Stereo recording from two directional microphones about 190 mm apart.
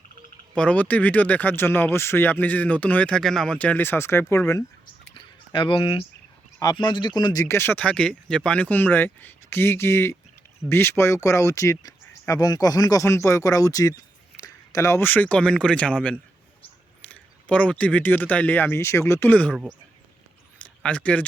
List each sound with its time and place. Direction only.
0.5 s speech: 5° left (ahead or behind)
5.1 s a sound: 25° left (ahead or behind)
6.6 s speech: 20° left (ahead or behind)
20.8 s speech: 5° left (ahead or behind)